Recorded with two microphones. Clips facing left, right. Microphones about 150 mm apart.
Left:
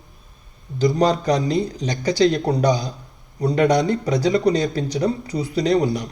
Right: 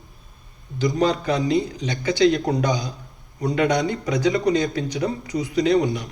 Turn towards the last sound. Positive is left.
turn(degrees=40)  # may be behind; listen again after turning